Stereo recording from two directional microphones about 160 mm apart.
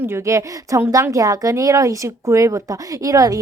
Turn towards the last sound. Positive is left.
turn(degrees=-20)  # may be behind; listen again after turning